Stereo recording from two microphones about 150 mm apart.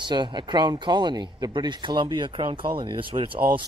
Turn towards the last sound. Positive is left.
turn(degrees=-35)  # may be behind; listen again after turning